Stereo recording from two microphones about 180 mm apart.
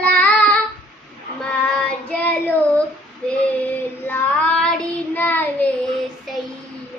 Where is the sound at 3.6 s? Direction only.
10° left (ahead or behind).